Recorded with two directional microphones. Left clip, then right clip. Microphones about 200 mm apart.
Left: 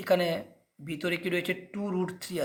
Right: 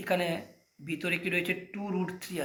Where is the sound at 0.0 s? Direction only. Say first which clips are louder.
Left 4 dB; 40° left (ahead or behind).